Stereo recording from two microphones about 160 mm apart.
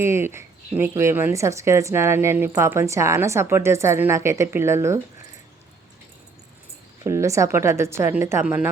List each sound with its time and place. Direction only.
0.0 s speech: 15° right (ahead or behind)
7.0 s speech: 20° right (ahead or behind)